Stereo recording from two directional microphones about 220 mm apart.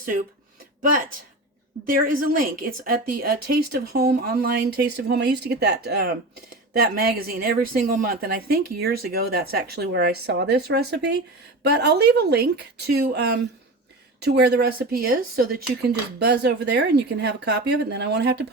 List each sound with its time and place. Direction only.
0.8 s a woman's voice: 40° right (ahead or behind)